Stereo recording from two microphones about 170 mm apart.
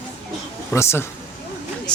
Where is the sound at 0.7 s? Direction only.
15° left (ahead or behind).